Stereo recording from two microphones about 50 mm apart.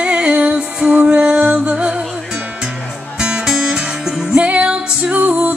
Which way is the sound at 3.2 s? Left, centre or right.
Centre.